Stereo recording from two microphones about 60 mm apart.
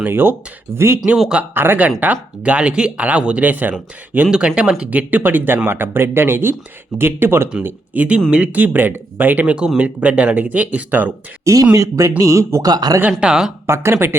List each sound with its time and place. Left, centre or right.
0.0 s speech: right
1.1 s speech: centre
1.5 s speech: right
2.4 s speech: centre
4.3 s speech: centre; by 7.5 s right
7.9 s speech: right
11.4 s speech: right
13.1 s speech: centre
13.7 s speech: right